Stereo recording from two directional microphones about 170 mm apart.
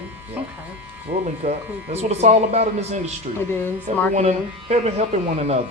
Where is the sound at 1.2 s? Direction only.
40° right (ahead or behind).